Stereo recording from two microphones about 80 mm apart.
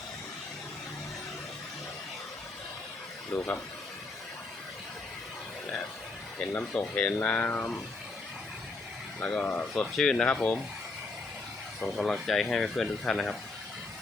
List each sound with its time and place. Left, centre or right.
3.3 s speech: centre
6.4 s speech: centre
9.2 s speech: centre
11.8 s speech: centre